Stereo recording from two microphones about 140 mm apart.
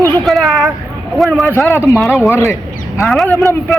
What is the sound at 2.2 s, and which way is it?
Crow, 20° left (ahead or behind).